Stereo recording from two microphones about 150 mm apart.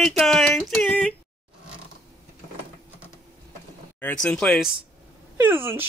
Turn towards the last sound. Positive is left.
turn(degrees=-15)  # may be behind; listen again after turning